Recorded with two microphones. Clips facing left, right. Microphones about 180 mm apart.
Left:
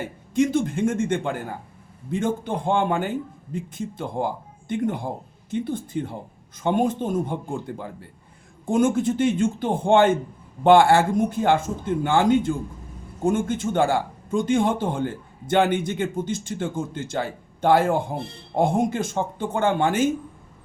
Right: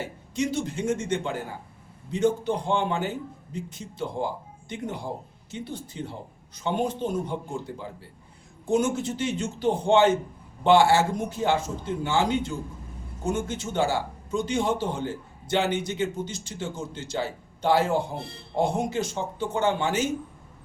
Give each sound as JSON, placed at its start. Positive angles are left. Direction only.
{"t": 0.3, "sound": "speech", "side_deg": 50}
{"t": 5.5, "sound": "speech", "side_deg": 50}
{"t": 8.7, "sound": "speech", "side_deg": 50}